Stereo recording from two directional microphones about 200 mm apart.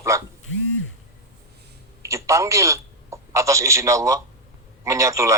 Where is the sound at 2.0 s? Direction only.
15° right (ahead or behind).